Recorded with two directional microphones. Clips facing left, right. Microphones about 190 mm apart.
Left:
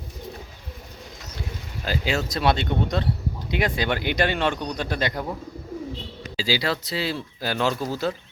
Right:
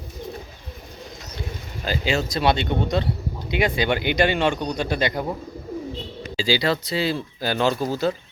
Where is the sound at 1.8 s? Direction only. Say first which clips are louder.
Right 2 dB; centre (ahead or behind).